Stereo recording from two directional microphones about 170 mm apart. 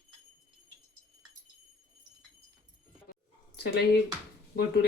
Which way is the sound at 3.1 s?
75° left (ahead or behind).